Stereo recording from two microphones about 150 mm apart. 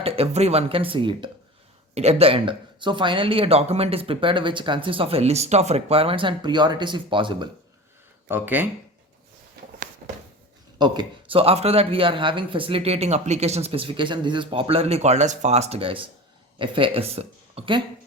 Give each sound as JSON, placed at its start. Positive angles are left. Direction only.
{"t": 0.0, "sound": "speech", "side_deg": -45}
{"t": 8.3, "sound": "speech", "side_deg": -15}
{"t": 10.8, "sound": "speech", "side_deg": -30}